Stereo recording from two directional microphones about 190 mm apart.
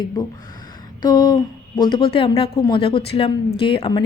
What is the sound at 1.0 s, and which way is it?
Speech, 20° left (ahead or behind).